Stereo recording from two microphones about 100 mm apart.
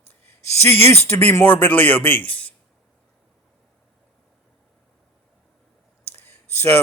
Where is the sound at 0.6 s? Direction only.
25° left (ahead or behind).